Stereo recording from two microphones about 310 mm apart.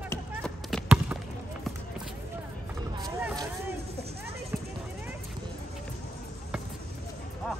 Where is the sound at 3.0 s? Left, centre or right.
Centre.